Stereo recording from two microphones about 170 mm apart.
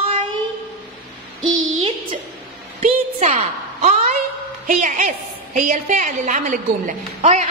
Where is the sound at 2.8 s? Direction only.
45° right (ahead or behind).